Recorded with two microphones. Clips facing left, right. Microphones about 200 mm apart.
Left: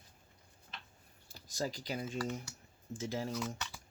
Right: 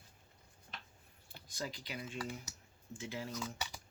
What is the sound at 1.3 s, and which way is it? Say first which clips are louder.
Speech: left 6 dB; 40° left (ahead or behind).